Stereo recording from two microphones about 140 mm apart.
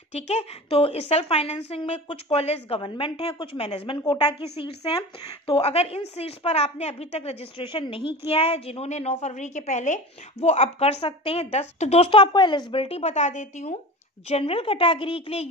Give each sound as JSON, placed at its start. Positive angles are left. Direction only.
{"t": 0.1, "sound": "a woman's voice", "side_deg": 50}
{"t": 14.3, "sound": "a woman's voice", "side_deg": 40}